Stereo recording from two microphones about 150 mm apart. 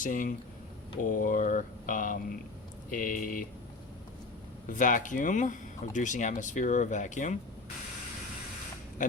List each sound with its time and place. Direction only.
0.0 s speech: 60° left (ahead or behind)
4.7 s speech: 60° left (ahead or behind)
9.0 s pig: 60° left (ahead or behind)